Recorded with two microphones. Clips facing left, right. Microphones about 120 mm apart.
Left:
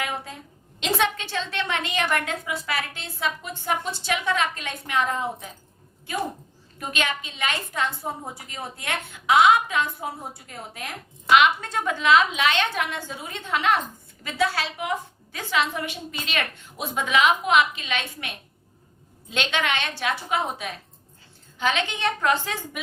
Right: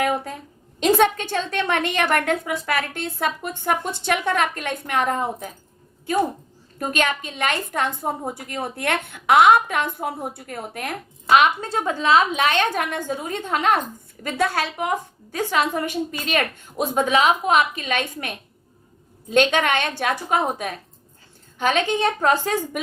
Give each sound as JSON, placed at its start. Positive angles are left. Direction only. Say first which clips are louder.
{"t": 0.8, "sound": "a woman's voice", "louder": "right 7 dB", "side_deg": -45}
{"t": 6.7, "sound": "a woman's voice", "louder": "right 5 dB", "side_deg": -45}
{"t": 11.3, "sound": "a woman's voice", "louder": "right 2 dB", "side_deg": -40}